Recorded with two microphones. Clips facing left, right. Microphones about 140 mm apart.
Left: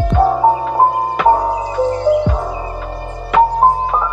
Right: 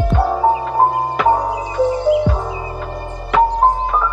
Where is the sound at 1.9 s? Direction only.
10° right (ahead or behind).